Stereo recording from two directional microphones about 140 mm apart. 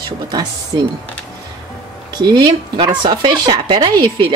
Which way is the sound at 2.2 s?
30° right (ahead or behind).